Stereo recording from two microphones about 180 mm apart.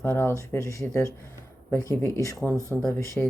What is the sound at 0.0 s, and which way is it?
Speech, 10° left (ahead or behind).